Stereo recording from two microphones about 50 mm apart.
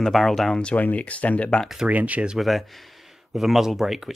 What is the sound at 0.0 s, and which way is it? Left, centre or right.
Speech, centre.